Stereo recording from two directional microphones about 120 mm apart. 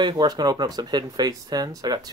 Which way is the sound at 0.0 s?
35° right (ahead or behind).